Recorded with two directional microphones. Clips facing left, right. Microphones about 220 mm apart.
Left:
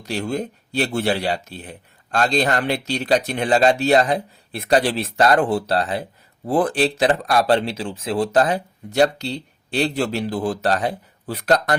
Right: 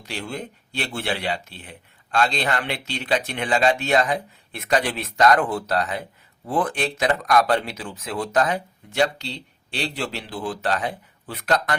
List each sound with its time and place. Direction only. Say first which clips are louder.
0.0 s speech: left 7 dB; 40° left (ahead or behind)